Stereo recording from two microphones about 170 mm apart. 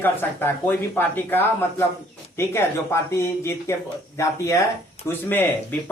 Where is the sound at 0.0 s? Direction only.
10° left (ahead or behind).